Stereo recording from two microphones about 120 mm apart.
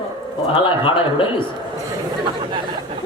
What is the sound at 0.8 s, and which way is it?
Speech, 45° left (ahead or behind).